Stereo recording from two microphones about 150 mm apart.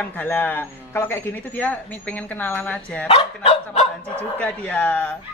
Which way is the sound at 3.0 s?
45° left (ahead or behind).